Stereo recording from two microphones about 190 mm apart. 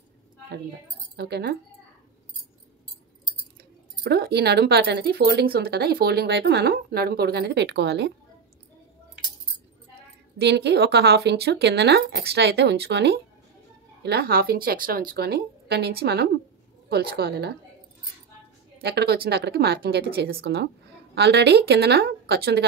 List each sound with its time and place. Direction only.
1.1 s speech: 60° right (ahead or behind)
4.0 s speech: 60° right (ahead or behind)
10.4 s speech: 60° right (ahead or behind)
18.8 s speech: 60° right (ahead or behind)